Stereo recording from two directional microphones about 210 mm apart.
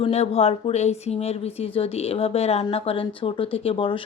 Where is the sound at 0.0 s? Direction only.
30° left (ahead or behind).